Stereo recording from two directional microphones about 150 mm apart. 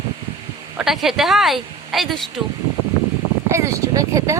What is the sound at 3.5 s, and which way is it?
Speech, 20° right (ahead or behind).